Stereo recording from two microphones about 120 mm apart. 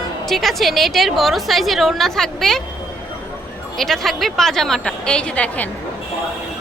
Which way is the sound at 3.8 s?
Centre (ahead or behind).